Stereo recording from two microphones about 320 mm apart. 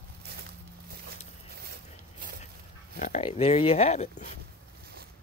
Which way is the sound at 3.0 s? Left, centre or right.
Left.